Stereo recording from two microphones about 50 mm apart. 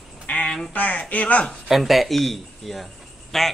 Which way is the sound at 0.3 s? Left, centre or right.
Left.